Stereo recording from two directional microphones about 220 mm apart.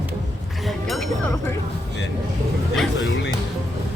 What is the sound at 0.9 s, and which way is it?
Music, centre (ahead or behind).